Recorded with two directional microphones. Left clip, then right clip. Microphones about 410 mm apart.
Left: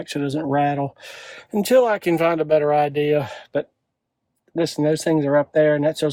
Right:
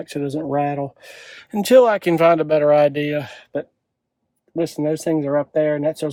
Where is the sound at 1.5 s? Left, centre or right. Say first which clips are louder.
Right 4 dB; centre.